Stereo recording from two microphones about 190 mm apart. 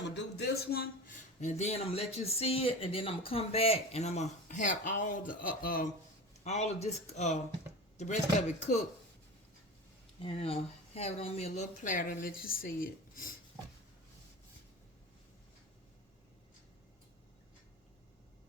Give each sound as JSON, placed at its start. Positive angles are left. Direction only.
{"t": 0.1, "sound": "a man's voice", "side_deg": 65}
{"t": 6.4, "sound": "a man's voice", "side_deg": 35}
{"t": 10.2, "sound": "speech", "side_deg": 30}